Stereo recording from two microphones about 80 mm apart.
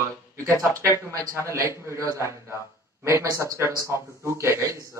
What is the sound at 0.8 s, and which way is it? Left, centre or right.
A man's voice, right.